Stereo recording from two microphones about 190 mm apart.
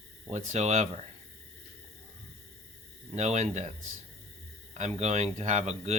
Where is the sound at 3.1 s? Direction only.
35° right (ahead or behind).